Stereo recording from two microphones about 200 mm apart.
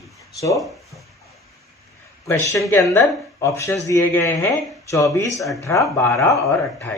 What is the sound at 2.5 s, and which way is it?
Speech, 15° left (ahead or behind).